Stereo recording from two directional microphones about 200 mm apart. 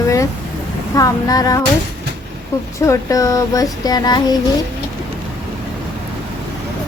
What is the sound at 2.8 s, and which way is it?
Child singing, 15° left (ahead or behind).